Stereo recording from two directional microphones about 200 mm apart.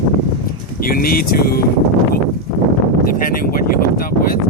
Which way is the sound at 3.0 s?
45° left (ahead or behind).